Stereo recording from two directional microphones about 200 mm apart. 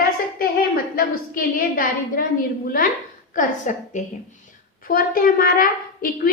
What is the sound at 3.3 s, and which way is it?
A woman's voice, 40° left (ahead or behind).